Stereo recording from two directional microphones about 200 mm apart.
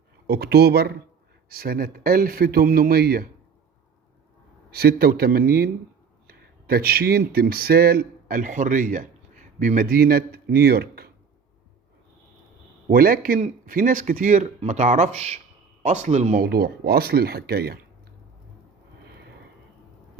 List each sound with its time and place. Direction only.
0.3 s speech: 55° right (ahead or behind)
4.7 s speech: 50° right (ahead or behind)
12.9 s speech: 45° right (ahead or behind)
16.4 s speech: 50° right (ahead or behind)
19.0 s a sound: 55° right (ahead or behind)